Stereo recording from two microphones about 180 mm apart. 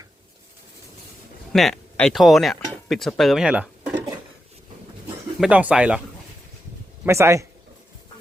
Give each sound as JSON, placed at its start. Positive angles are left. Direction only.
{"t": 1.5, "sound": "speech", "side_deg": 0}
{"t": 5.4, "sound": "speech", "side_deg": -5}
{"t": 7.0, "sound": "speech", "side_deg": -15}